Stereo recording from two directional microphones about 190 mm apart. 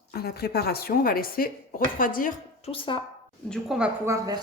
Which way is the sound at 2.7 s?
25° left (ahead or behind).